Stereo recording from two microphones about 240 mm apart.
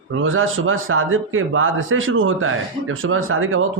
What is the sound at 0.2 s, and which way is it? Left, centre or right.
A man's voice, right.